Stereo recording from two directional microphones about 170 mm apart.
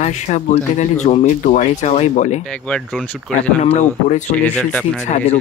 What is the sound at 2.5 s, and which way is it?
Speech, 5° left (ahead or behind).